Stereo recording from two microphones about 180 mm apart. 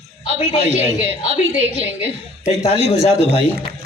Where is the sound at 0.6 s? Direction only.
35° right (ahead or behind).